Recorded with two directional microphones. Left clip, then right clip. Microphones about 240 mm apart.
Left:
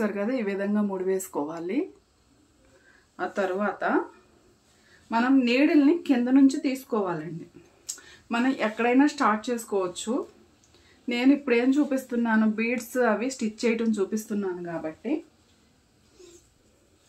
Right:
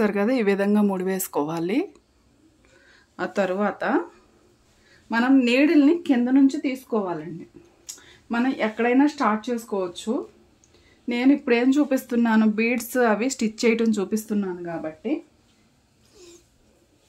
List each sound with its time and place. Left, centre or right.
0.0 s speech: right
3.2 s speech: right
5.1 s speech: right